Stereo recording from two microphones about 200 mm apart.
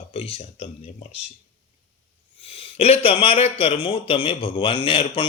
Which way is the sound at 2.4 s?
30° left (ahead or behind).